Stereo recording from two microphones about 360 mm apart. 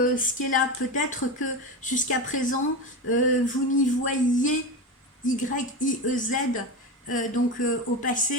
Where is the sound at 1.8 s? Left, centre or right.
Left.